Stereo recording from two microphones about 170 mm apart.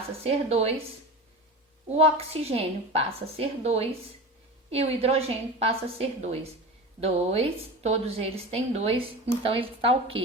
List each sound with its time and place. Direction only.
0.2 s a woman's voice: 35° right (ahead or behind)
1.9 s a woman's voice: 35° right (ahead or behind)